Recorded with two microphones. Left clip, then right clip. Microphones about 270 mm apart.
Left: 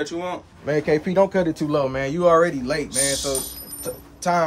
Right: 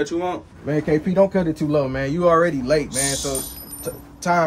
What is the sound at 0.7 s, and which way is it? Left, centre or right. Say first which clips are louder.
Speech: left 1 dB; right.